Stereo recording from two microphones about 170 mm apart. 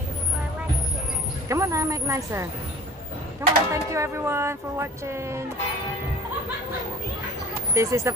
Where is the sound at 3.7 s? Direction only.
15° right (ahead or behind).